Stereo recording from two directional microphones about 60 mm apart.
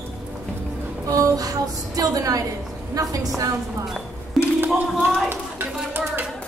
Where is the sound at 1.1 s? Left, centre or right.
Right.